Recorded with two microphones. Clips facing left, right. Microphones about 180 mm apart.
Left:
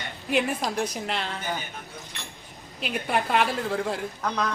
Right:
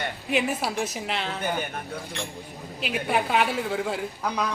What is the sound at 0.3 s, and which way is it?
A woman's voice, centre (ahead or behind).